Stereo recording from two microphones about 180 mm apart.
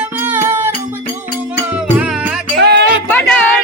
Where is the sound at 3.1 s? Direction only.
5° left (ahead or behind).